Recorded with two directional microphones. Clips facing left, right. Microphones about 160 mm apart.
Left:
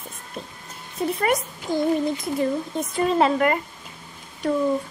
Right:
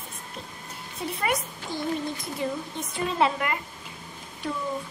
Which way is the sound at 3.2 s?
45° left (ahead or behind).